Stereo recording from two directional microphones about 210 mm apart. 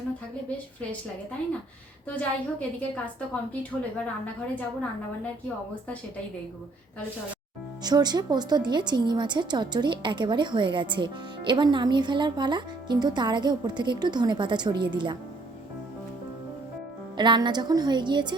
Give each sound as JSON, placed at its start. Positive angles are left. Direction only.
{"t": 2.0, "sound": "a woman's voice", "side_deg": 5}
{"t": 7.9, "sound": "a woman's voice", "side_deg": -20}
{"t": 17.2, "sound": "a woman's voice", "side_deg": -20}